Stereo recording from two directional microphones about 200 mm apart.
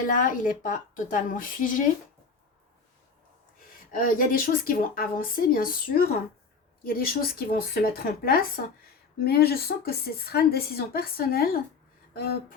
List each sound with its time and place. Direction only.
0.1 s a woman's voice: 40° left (ahead or behind)
3.9 s a woman's voice: 45° left (ahead or behind)